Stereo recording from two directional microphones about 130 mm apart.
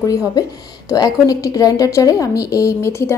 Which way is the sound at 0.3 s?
30° left (ahead or behind).